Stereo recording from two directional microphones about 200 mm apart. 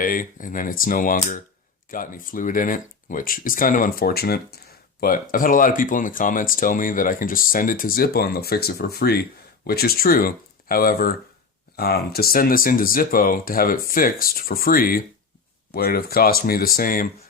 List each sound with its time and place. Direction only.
0.0 s speech: 45° left (ahead or behind)